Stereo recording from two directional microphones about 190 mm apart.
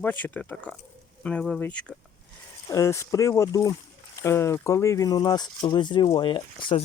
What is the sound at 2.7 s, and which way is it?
Speech, 15° left (ahead or behind).